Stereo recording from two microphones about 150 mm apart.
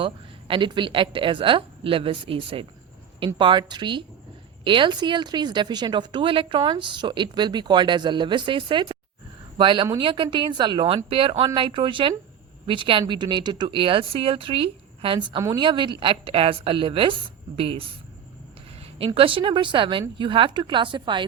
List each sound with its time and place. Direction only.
0.0 s speech: 35° right (ahead or behind)